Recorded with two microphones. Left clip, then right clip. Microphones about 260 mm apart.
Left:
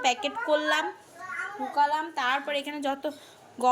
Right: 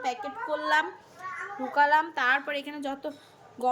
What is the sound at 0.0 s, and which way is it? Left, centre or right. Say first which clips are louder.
Speech: left 5 dB; centre.